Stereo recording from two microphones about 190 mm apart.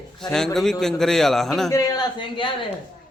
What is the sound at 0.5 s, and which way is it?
A man's voice, centre (ahead or behind).